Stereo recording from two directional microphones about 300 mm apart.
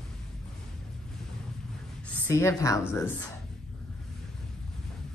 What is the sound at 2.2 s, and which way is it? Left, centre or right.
A woman's voice, centre.